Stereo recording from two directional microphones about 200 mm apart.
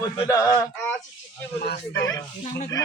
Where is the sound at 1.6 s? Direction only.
65° left (ahead or behind).